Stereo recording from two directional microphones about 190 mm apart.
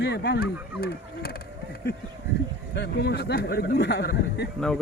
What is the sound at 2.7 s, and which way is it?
Speech, 60° left (ahead or behind).